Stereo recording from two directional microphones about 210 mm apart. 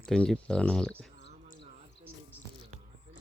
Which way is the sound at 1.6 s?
25° right (ahead or behind).